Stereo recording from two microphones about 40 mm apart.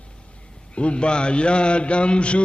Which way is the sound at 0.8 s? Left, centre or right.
Left.